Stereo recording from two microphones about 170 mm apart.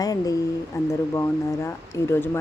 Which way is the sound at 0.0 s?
20° left (ahead or behind).